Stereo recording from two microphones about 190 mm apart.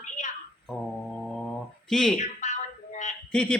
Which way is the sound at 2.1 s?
40° left (ahead or behind).